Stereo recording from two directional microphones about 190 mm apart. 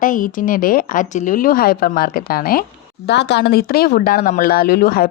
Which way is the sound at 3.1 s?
65° left (ahead or behind).